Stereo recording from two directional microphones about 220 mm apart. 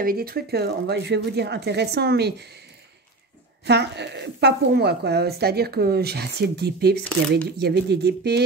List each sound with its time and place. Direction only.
0.0 s speech: 40° right (ahead or behind)
3.6 s speech: 50° right (ahead or behind)